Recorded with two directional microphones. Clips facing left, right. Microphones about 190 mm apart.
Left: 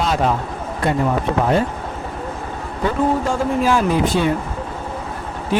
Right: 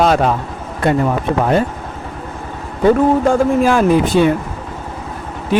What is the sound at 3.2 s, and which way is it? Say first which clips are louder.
A man's voice: right 6 dB; 55° right (ahead or behind).